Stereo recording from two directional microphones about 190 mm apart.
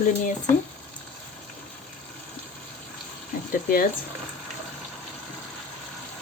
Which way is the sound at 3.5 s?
50° left (ahead or behind).